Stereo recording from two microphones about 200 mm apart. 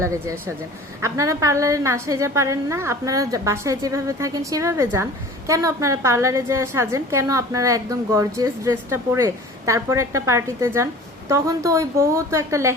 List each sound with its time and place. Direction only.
0.0 s a woman's voice: 15° right (ahead or behind)